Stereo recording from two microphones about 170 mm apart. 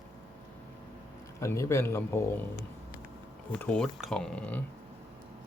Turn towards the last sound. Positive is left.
turn(degrees=5)  # may be behind; listen again after turning